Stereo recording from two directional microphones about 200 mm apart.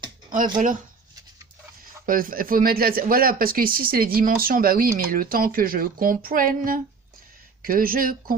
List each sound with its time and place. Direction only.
0.3 s speech: 40° right (ahead or behind)
2.0 s speech: 45° right (ahead or behind)